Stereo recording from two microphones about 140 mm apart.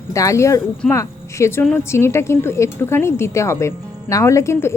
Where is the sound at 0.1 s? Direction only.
20° left (ahead or behind).